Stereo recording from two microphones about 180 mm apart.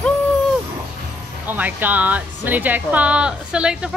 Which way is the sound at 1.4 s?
10° right (ahead or behind).